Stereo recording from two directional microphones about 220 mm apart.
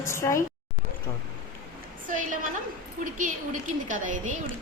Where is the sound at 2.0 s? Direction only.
35° right (ahead or behind).